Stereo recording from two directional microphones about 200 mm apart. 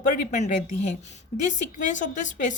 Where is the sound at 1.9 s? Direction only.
40° left (ahead or behind).